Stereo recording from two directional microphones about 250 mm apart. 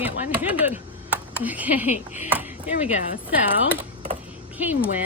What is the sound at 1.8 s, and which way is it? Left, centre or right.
Speech, left.